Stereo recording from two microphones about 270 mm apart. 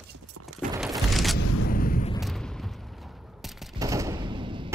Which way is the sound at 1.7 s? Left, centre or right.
Left.